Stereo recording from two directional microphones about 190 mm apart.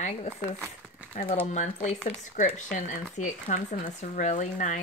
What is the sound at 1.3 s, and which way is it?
Speech, 40° left (ahead or behind).